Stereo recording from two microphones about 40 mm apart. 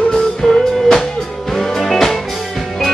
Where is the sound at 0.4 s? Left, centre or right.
Centre.